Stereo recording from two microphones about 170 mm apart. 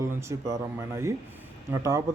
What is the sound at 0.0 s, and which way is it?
Speech, 15° right (ahead or behind).